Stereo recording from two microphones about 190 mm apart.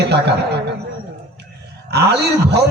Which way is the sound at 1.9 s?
60° right (ahead or behind).